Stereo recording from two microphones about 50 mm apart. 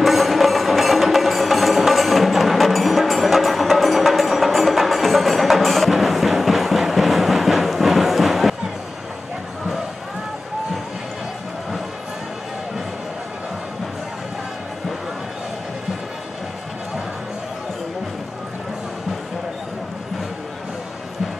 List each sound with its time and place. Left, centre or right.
0.0 s music: centre